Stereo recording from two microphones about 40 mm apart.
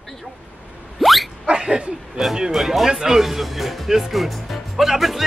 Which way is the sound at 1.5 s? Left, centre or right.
Centre.